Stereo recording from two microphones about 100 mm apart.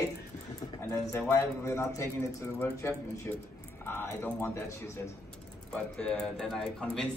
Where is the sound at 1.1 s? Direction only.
25° left (ahead or behind).